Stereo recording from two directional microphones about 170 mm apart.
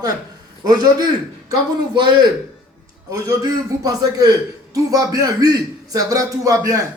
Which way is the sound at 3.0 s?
20° right (ahead or behind).